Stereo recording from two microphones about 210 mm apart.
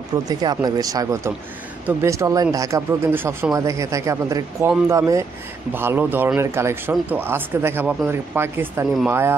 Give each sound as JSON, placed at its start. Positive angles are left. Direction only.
{"t": 0.3, "sound": "speech", "side_deg": -20}